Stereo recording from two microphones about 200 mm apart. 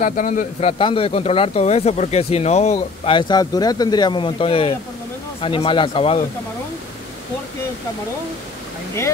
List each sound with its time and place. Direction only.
0.0 s a man's voice: 40° left (ahead or behind)
0.7 s speech: 25° left (ahead or behind)